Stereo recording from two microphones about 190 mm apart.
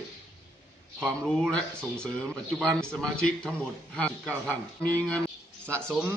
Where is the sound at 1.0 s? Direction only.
5° left (ahead or behind).